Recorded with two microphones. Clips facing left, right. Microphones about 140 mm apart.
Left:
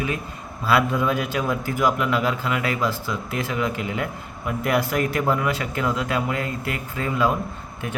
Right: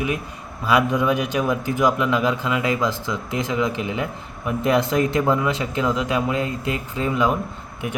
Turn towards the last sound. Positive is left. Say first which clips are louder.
# right 2 dB
turn(degrees=-20)  # may be behind; listen again after turning